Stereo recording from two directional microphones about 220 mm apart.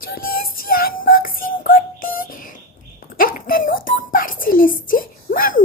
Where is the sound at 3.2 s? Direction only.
40° left (ahead or behind).